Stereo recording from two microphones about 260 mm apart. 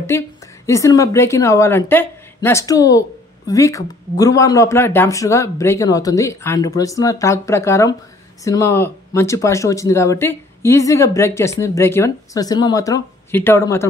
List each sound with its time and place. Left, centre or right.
0.1 s a woman's voice: centre